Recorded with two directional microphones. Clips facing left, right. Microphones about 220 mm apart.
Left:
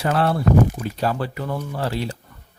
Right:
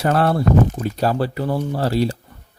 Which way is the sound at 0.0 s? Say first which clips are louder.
Right 3 dB; 40° right (ahead or behind).